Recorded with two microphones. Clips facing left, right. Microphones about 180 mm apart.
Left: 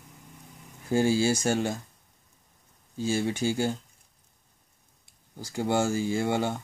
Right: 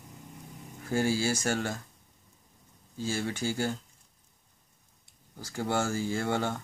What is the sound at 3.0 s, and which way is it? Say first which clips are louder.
Speech: left 5 dB; 20° left (ahead or behind).